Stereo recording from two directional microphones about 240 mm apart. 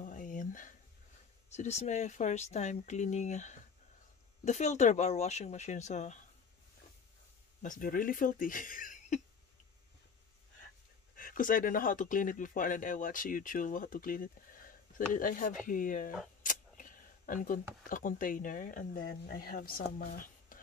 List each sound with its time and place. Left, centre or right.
0.0 s a sound: left
1.5 s speech: left
7.6 s speech: left
11.1 s speech: left